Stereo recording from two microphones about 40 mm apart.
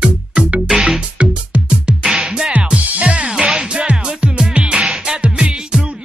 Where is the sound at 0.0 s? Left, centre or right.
Right.